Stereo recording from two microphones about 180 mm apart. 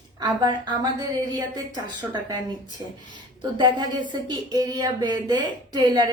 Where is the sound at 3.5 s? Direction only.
25° right (ahead or behind).